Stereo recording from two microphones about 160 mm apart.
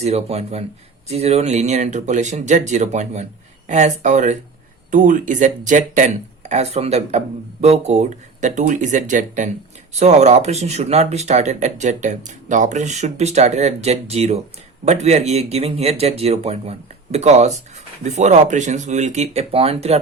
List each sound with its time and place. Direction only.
0.0 s speech: 40° right (ahead or behind)